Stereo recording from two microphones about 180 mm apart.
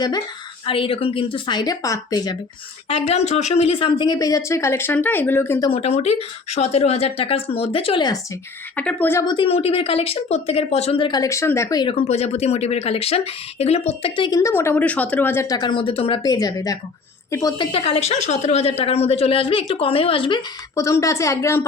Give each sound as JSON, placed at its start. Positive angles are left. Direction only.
{"t": 0.6, "sound": "speech", "side_deg": 30}
{"t": 2.9, "sound": "speech", "side_deg": 35}
{"t": 5.6, "sound": "a woman's voice", "side_deg": 35}
{"t": 8.7, "sound": "a woman's voice", "side_deg": 5}
{"t": 9.2, "sound": "speech", "side_deg": 30}
{"t": 17.7, "sound": "a woman's voice", "side_deg": 30}
{"t": 20.7, "sound": "a woman's voice", "side_deg": 15}